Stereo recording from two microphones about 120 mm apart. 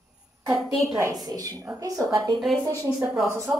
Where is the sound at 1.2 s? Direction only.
30° right (ahead or behind).